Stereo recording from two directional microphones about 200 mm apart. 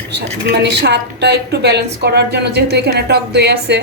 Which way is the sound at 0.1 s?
55° right (ahead or behind).